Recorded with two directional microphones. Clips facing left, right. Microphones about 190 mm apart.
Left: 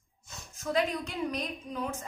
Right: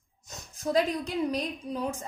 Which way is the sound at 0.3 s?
35° right (ahead or behind).